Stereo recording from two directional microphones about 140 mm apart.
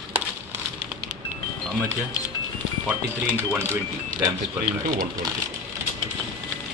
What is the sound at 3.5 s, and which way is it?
Speech, 15° right (ahead or behind).